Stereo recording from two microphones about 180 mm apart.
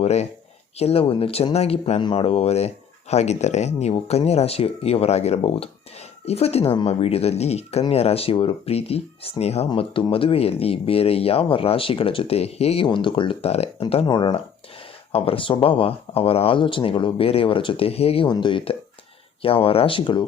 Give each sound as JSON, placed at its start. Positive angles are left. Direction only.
{"t": 0.0, "sound": "speech", "side_deg": 35}